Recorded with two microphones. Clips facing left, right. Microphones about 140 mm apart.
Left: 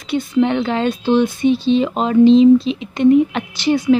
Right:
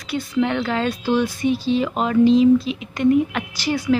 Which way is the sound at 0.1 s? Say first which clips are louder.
Left 5 dB; 25° left (ahead or behind).